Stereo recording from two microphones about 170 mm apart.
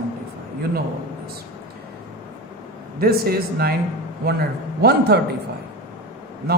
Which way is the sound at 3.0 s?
65° right (ahead or behind).